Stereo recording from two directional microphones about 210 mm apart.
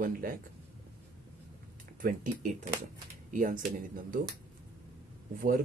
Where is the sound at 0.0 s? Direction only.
40° right (ahead or behind).